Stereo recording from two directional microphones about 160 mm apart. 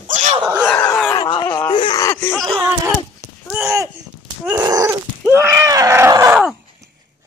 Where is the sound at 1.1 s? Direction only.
25° left (ahead or behind).